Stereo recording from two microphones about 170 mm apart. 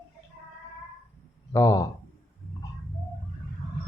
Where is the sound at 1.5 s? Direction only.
20° left (ahead or behind).